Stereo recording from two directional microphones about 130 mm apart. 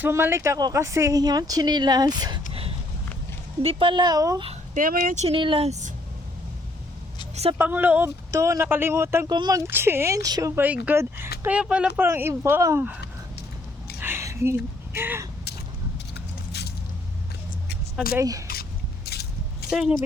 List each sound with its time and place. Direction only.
0.0 s a woman's voice: 20° right (ahead or behind)
2.5 s a sound: 45° right (ahead or behind)
3.6 s a woman's voice: 45° right (ahead or behind); by 4.4 s 30° right (ahead or behind)
4.7 s speech: 90° right
5.2 s speech: 40° right (ahead or behind); by 5.9 s 60° right (ahead or behind)
7.6 s a woman's voice: 15° right (ahead or behind)
9.3 s a woman's voice: 30° right (ahead or behind)
9.6 s a woman's voice: 15° right (ahead or behind)
10.6 s speech: 15° right (ahead or behind)
12.0 s a woman's voice: 20° right (ahead or behind)
14.0 s a sound: 20° right (ahead or behind)
18.2 s a woman's voice: 25° right (ahead or behind)
19.7 s speech: 5° right (ahead or behind)